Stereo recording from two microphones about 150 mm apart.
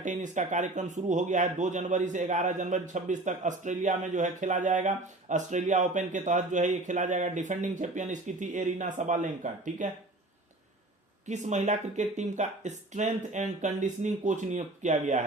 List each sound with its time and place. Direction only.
0.0 s speech: 55° right (ahead or behind)
11.3 s speech: 50° right (ahead or behind)